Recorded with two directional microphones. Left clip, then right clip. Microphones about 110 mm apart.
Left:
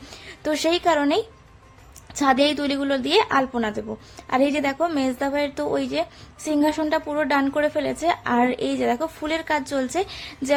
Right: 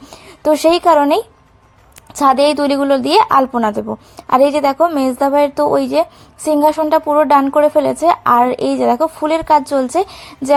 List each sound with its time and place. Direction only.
0.3 s a woman's voice: 40° right (ahead or behind)